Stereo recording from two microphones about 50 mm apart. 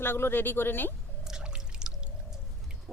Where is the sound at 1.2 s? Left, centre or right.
Centre.